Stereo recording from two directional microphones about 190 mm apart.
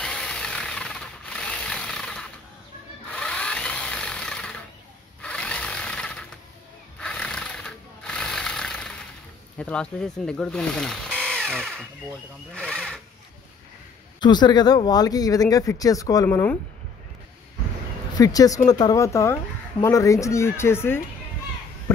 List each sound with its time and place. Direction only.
0.0 s jackhammer: 5° left (ahead or behind)
3.1 s a sound: 5° left (ahead or behind)
5.2 s sewing machine: 5° left (ahead or behind)
7.0 s jackhammer: 5° left (ahead or behind)
9.6 s speech: 5° left (ahead or behind)
14.2 s speech: 20° left (ahead or behind)
18.2 s speech: 20° left (ahead or behind)